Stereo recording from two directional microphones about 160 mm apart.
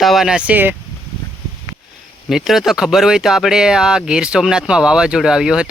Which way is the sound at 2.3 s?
Centre (ahead or behind).